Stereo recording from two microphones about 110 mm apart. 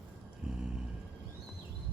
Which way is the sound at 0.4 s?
10° right (ahead or behind).